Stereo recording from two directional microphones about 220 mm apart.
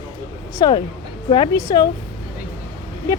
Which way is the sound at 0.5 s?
20° left (ahead or behind).